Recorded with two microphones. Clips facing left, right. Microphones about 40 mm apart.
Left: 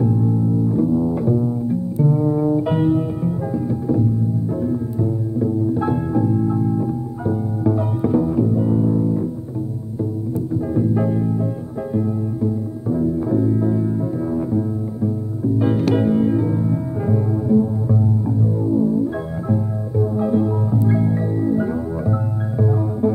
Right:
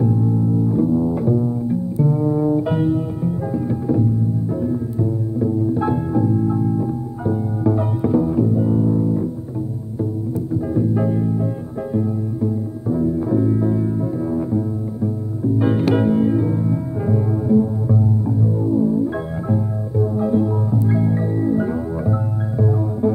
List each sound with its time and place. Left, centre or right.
0.0 s double bass: centre
2.7 s music: centre
3.6 s music: centre
5.4 s music: centre
6.1 s music: centre
8.0 s music: centre
10.5 s music: centre
15.6 s music: centre
16.1 s music: centre
20.2 s music: centre
20.9 s music: centre
22.6 s music: centre